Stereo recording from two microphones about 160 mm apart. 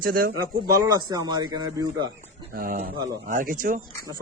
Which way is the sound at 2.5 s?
65° right (ahead or behind).